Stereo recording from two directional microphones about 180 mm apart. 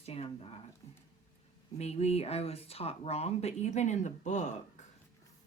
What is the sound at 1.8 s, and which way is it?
Speech, 35° left (ahead or behind).